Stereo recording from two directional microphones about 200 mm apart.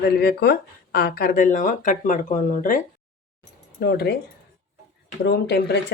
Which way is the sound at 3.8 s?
55° left (ahead or behind).